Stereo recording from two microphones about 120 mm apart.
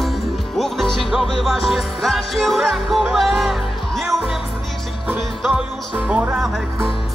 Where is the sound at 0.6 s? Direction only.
5° left (ahead or behind).